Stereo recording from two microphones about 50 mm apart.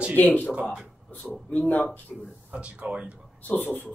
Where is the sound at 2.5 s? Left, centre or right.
Right.